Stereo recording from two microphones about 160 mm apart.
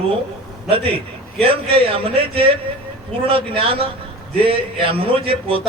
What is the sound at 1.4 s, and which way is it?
A man's voice, 35° right (ahead or behind).